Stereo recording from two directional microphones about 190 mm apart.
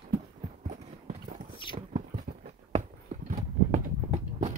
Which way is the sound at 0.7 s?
40° right (ahead or behind).